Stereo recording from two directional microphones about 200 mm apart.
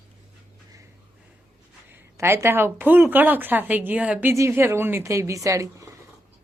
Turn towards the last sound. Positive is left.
turn(degrees=-15)  # may be behind; listen again after turning